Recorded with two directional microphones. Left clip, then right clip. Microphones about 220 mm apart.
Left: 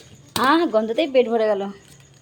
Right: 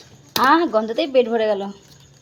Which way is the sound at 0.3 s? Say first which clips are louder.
Right 2 dB; 10° left (ahead or behind).